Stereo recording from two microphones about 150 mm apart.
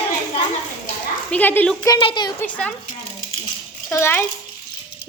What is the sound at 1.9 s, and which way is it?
Speech, 30° left (ahead or behind).